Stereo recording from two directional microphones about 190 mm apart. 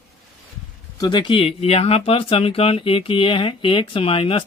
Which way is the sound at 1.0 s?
25° left (ahead or behind).